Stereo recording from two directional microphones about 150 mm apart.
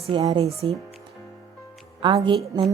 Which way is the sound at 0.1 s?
30° right (ahead or behind).